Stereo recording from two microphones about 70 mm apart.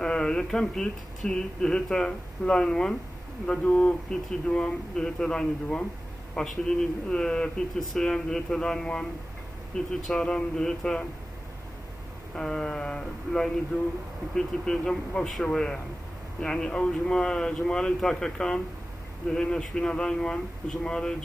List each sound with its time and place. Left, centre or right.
0.0 s speech: centre
10.1 s speech: centre
12.4 s speech: centre